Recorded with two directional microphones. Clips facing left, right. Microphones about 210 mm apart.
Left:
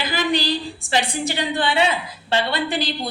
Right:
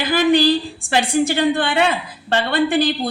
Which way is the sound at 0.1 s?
55° right (ahead or behind).